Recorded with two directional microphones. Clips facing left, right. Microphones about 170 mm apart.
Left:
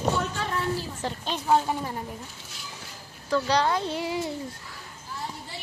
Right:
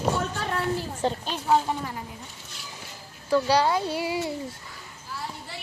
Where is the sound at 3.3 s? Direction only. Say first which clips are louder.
Right 2 dB; 10° right (ahead or behind).